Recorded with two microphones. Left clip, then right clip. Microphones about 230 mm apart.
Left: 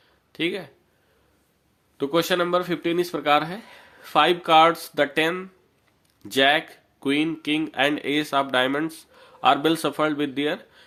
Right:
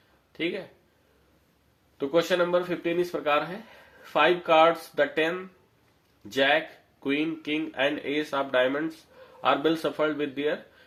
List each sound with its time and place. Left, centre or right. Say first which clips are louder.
0.3 s speech: left 4 dB; left
2.0 s speech: left 2 dB; left